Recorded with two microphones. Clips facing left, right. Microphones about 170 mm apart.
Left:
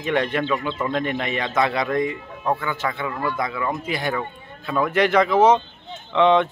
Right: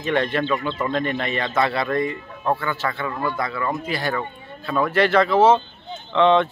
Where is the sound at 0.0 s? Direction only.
15° left (ahead or behind).